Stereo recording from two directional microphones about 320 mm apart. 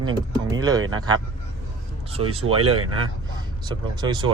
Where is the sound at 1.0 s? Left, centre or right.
Centre.